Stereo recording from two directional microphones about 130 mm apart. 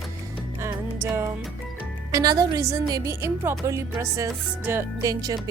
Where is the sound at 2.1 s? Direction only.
30° right (ahead or behind).